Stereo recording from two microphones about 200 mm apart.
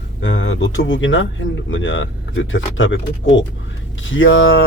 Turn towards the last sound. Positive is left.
turn(degrees=75)  # may be behind; listen again after turning